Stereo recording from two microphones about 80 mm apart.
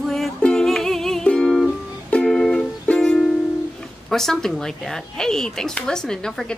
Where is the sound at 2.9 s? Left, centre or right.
Centre.